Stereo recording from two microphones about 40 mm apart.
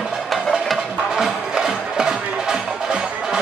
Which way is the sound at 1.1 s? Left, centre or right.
Centre.